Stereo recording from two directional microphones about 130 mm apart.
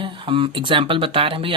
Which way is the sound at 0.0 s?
40° right (ahead or behind).